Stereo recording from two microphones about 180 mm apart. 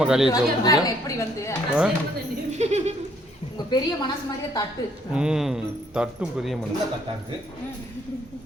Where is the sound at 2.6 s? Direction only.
40° right (ahead or behind).